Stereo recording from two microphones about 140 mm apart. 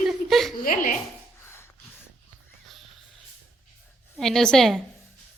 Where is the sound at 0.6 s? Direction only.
80° left.